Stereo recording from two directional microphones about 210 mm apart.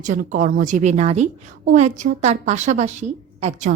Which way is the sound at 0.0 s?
40° right (ahead or behind).